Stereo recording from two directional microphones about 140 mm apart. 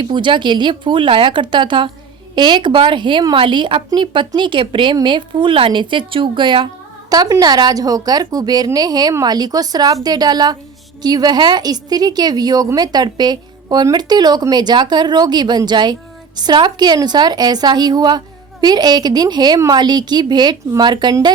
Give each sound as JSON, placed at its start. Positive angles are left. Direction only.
{"t": 0.0, "sound": "a woman's voice", "side_deg": -35}